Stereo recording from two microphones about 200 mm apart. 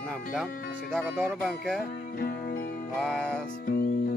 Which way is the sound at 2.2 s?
45° left (ahead or behind).